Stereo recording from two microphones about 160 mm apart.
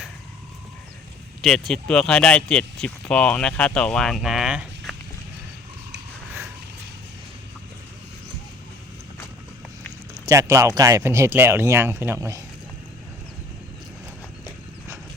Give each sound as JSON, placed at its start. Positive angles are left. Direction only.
{"t": 1.4, "sound": "speech", "side_deg": 0}
{"t": 10.2, "sound": "speech", "side_deg": -20}